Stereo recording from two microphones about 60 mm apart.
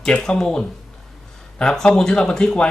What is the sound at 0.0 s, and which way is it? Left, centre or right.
Speech, centre.